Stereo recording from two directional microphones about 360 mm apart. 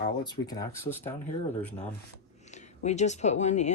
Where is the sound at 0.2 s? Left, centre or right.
Centre.